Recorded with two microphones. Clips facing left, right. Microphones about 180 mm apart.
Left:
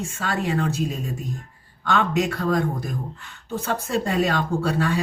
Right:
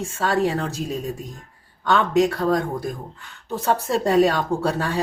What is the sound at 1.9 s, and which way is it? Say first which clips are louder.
Speech: right 4 dB; 35° right (ahead or behind).